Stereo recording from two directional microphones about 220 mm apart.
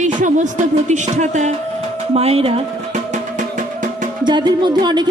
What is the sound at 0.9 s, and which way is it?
Speech, 30° right (ahead or behind).